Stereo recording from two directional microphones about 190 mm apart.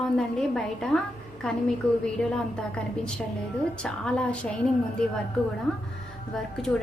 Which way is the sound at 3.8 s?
5° left (ahead or behind).